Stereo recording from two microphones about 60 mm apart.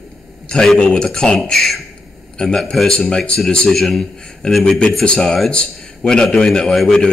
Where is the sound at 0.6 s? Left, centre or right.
Centre.